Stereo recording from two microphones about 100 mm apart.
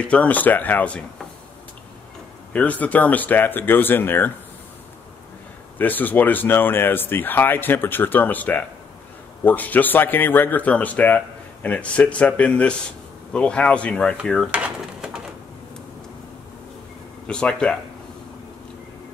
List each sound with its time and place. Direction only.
0.0 s speech: 15° left (ahead or behind)
2.5 s speech: 15° left (ahead or behind)
5.8 s speech: 20° left (ahead or behind)
14.2 s drawer open or close: 5° left (ahead or behind)
14.5 s drawer open or close: 5° right (ahead or behind)
17.3 s speech: 10° left (ahead or behind)